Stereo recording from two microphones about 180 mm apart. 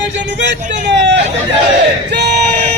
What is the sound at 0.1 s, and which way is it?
Vehicle, 75° right (ahead or behind).